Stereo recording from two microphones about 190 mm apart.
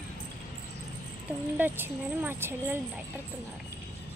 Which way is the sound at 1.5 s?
10° right (ahead or behind).